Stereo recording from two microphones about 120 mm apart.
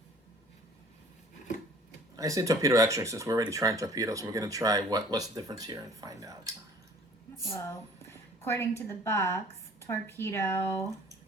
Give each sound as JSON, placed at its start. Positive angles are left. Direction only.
{"t": 2.1, "sound": "speech", "side_deg": -25}
{"t": 7.4, "sound": "speech", "side_deg": 25}